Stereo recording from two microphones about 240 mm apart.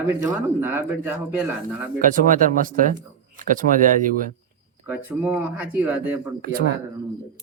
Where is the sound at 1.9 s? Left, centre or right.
Right.